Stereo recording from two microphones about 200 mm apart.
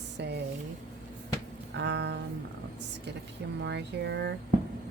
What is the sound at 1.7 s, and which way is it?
Speech, 60° right (ahead or behind).